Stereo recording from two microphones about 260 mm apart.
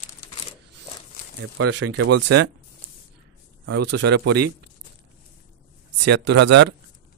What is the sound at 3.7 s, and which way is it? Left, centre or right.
Speech, right.